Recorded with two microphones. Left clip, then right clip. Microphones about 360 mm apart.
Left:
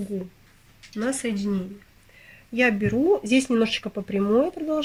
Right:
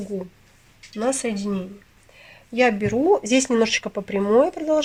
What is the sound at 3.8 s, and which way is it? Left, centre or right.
Speech, right.